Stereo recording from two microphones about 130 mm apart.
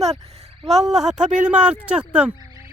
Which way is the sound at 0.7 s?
Centre (ahead or behind).